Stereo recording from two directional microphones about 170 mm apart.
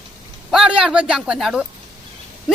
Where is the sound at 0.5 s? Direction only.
5° right (ahead or behind).